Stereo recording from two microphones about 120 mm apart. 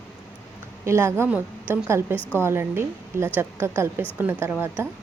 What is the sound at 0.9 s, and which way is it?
A woman's voice, 20° right (ahead or behind).